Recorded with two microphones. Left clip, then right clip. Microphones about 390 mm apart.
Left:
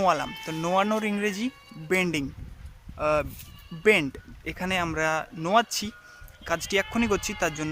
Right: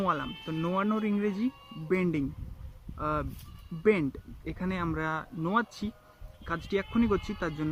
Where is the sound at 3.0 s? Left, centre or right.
Centre.